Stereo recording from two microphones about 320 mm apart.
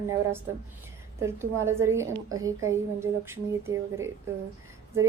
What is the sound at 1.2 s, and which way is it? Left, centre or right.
A woman's voice, centre.